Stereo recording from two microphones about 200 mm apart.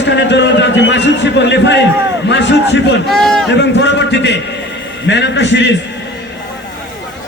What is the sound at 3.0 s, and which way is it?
Speech, centre (ahead or behind).